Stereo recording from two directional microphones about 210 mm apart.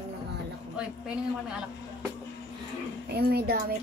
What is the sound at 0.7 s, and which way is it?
Speech, 5° right (ahead or behind).